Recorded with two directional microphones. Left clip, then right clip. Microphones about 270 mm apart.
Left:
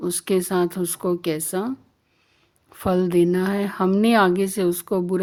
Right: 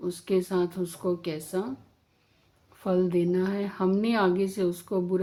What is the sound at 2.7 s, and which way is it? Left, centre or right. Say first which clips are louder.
Speech: left 6 dB; left.